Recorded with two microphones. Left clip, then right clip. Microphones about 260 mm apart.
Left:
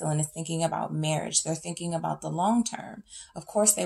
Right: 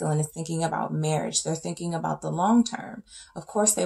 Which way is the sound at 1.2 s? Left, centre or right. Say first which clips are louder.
Right 2 dB; left.